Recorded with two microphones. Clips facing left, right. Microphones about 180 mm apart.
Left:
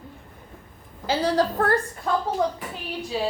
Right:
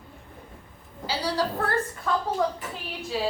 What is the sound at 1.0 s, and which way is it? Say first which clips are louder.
Speech: left 5 dB; 50° left (ahead or behind).